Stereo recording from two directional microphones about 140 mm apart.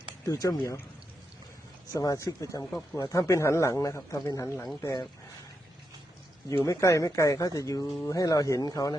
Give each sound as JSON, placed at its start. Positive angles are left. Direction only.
{"t": 0.3, "sound": "speech", "side_deg": 25}
{"t": 1.9, "sound": "speech", "side_deg": 25}
{"t": 6.5, "sound": "speech", "side_deg": 20}